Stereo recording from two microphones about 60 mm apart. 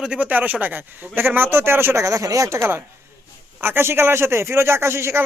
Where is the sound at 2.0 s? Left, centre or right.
Right.